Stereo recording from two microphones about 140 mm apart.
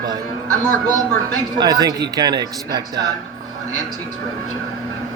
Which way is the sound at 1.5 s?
30° right (ahead or behind).